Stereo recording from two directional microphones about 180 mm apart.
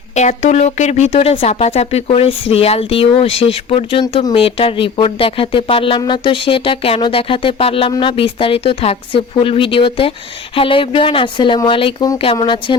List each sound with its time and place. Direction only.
0.1 s speech: 40° left (ahead or behind)